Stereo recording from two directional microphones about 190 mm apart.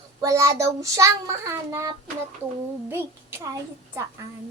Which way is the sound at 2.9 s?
15° right (ahead or behind).